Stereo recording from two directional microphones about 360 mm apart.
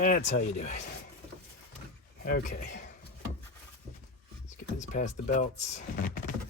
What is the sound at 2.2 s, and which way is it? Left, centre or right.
Speech, centre.